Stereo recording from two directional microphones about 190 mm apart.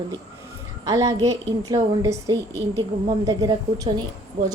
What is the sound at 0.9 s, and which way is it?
A woman's voice, 20° right (ahead or behind).